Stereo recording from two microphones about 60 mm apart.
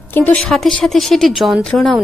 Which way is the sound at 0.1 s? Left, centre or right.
Left.